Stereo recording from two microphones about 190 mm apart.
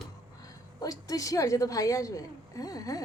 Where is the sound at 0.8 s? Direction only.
20° left (ahead or behind).